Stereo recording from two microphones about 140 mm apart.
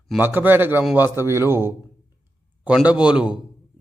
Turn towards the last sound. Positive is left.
turn(degrees=-5)  # may be behind; listen again after turning